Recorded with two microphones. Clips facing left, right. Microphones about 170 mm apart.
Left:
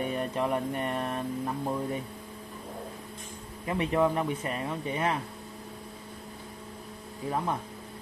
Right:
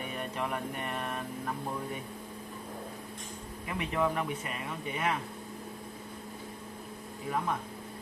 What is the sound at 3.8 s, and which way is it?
Speech, 30° left (ahead or behind).